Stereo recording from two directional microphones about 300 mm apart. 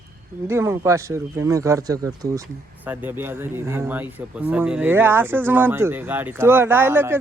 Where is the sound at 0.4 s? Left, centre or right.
Centre.